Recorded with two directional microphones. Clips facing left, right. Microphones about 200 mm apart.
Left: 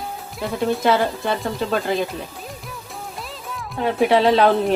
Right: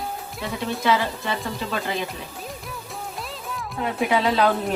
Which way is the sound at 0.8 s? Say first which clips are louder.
Left 3 dB; 45° left (ahead or behind).